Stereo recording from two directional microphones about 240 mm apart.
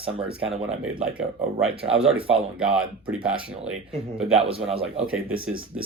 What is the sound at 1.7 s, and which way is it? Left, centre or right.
Speech, right.